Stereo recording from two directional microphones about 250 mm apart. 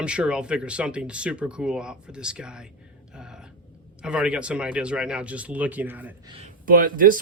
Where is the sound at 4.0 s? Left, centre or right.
Centre.